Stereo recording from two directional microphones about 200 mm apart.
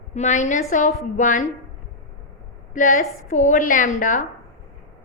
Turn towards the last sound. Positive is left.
turn(degrees=40)  # may be behind; listen again after turning